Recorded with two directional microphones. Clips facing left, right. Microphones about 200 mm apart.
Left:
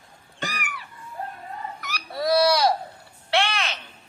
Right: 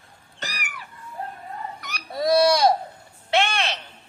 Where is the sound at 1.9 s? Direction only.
25° right (ahead or behind).